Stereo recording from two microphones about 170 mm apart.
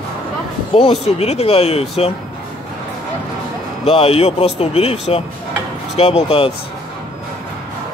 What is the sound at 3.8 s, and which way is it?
Speech, 35° left (ahead or behind).